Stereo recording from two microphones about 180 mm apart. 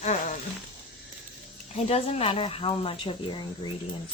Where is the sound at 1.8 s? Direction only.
35° left (ahead or behind).